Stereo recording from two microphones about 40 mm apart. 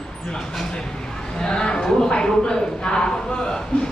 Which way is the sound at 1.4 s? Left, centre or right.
Centre.